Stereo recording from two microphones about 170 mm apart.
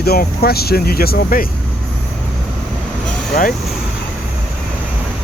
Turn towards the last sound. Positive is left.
turn(degrees=55)  # may be behind; listen again after turning